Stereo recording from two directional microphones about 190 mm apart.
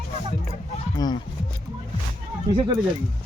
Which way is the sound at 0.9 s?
20° left (ahead or behind).